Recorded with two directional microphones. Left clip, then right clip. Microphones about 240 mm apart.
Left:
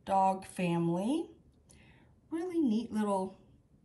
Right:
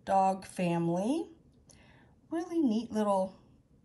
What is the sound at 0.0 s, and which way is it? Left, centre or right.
Speech, centre.